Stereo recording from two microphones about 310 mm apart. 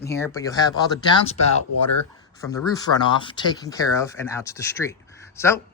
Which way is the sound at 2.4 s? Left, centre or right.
Centre.